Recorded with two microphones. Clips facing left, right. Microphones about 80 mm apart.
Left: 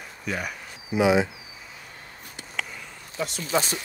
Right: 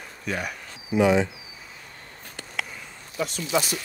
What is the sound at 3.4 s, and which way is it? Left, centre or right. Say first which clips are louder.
Speech: even; left.